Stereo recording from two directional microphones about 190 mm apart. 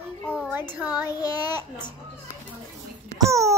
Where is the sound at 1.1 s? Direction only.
20° left (ahead or behind).